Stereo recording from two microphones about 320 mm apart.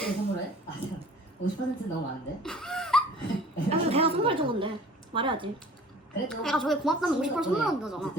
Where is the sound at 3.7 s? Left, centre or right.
Centre.